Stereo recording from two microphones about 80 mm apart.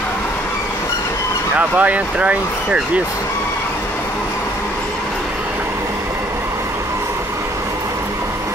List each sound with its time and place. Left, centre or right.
1.8 s speech: centre